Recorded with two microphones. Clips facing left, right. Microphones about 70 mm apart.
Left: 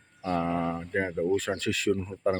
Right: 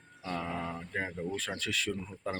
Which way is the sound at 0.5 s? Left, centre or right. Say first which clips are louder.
Left 8 dB; left.